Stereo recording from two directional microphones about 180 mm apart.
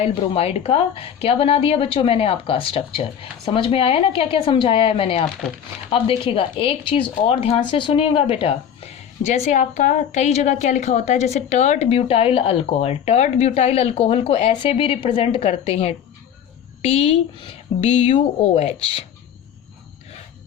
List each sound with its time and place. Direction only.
0.0 s speech: 30° left (ahead or behind)